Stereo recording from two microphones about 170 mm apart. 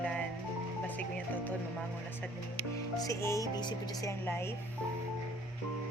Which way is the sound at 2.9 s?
20° left (ahead or behind).